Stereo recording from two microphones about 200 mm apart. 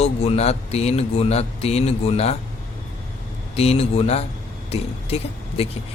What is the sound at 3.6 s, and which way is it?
Speech, 30° left (ahead or behind).